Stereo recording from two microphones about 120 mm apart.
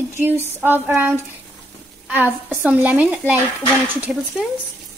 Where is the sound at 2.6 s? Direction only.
15° right (ahead or behind).